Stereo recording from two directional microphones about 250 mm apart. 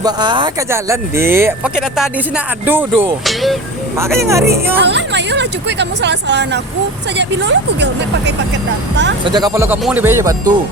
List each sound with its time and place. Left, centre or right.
0.0 s speech: centre
4.2 s speech: centre
4.8 s speech: right
9.2 s speech: centre